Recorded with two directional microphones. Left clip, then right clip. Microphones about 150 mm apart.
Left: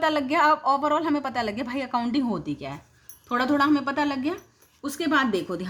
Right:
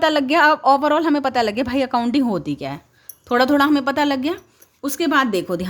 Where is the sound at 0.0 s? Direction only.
45° right (ahead or behind).